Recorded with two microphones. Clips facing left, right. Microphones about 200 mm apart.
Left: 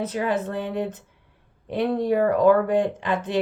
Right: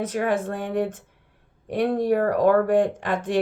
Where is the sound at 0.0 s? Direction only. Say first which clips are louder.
Right 1 dB; 50° right (ahead or behind).